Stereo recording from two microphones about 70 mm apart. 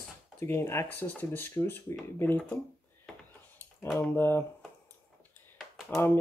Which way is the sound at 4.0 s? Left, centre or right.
Left.